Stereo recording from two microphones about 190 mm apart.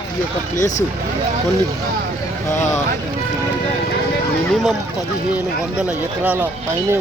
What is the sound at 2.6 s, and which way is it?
Speech, 40° left (ahead or behind).